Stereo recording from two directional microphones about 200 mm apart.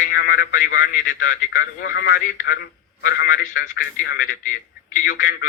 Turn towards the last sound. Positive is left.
turn(degrees=45)  # may be behind; listen again after turning